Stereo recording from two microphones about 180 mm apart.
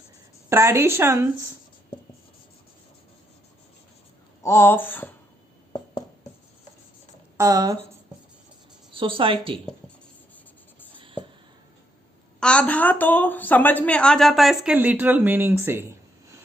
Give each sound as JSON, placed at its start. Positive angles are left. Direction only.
{"t": 0.5, "sound": "speech", "side_deg": -15}
{"t": 4.4, "sound": "speech", "side_deg": 10}
{"t": 7.3, "sound": "speech", "side_deg": -20}
{"t": 8.9, "sound": "speech", "side_deg": -30}
{"t": 10.9, "sound": "a sound", "side_deg": -30}
{"t": 12.4, "sound": "a woman's voice", "side_deg": 5}